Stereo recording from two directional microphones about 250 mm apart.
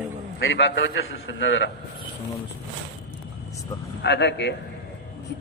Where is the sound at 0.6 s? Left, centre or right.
Left.